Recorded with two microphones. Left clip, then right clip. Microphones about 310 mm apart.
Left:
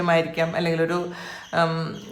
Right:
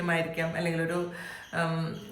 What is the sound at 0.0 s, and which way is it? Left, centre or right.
A man's voice, centre.